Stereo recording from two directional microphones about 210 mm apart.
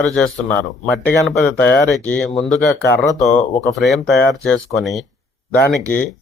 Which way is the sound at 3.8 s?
Centre (ahead or behind).